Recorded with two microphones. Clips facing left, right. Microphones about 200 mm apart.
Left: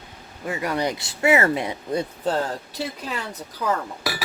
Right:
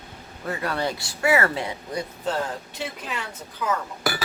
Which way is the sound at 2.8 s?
35° left (ahead or behind).